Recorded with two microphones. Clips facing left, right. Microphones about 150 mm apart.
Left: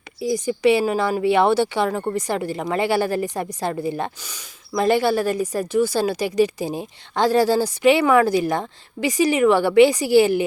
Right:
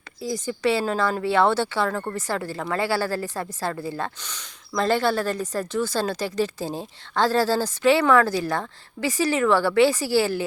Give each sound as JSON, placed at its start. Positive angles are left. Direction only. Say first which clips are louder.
{"t": 0.2, "sound": "a woman's voice", "louder": "left 6 dB", "side_deg": 15}